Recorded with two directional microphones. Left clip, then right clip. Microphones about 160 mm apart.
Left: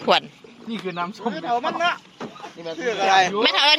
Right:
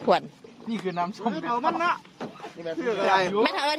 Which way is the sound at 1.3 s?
65° right (ahead or behind).